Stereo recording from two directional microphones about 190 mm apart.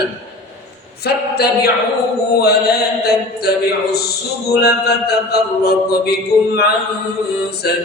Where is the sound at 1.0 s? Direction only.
55° left (ahead or behind).